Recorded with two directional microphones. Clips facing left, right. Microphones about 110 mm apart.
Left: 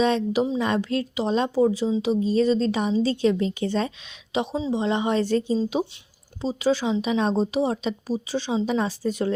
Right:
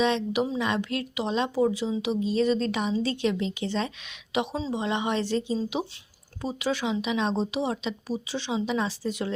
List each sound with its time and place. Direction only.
0.0 s a woman's voice: 40° left (ahead or behind)
4.3 s a woman's voice: 30° left (ahead or behind)
5.2 s a woman's voice: 45° left (ahead or behind)